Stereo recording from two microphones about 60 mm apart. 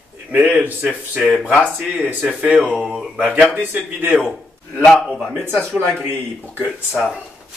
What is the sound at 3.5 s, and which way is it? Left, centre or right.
Speech, right.